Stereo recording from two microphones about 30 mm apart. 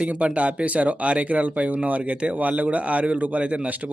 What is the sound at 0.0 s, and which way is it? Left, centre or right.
Speech, right.